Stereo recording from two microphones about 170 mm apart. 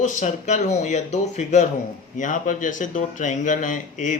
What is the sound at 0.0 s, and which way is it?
Speech, 45° left (ahead or behind).